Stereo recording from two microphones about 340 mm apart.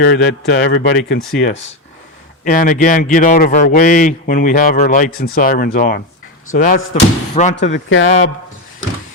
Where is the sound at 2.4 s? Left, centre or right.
Left.